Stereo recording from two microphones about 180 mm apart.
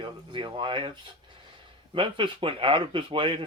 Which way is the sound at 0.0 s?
25° right (ahead or behind).